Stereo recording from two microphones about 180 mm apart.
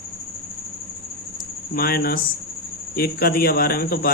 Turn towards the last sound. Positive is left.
turn(degrees=55)  # may be behind; listen again after turning